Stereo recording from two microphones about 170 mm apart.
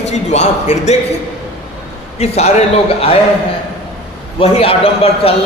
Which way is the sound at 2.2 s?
40° left (ahead or behind).